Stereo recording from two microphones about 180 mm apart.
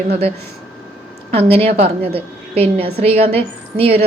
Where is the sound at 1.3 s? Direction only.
35° right (ahead or behind).